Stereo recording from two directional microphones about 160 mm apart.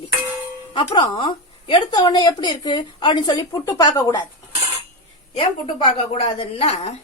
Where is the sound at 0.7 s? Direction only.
30° left (ahead or behind).